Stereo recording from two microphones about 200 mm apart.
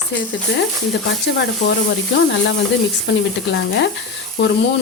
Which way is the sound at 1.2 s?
60° left (ahead or behind).